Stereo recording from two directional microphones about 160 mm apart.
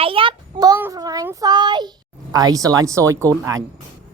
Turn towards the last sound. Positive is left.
turn(degrees=-20)  # may be behind; listen again after turning